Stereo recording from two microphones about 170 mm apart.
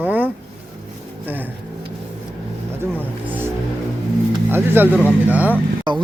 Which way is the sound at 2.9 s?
10° right (ahead or behind).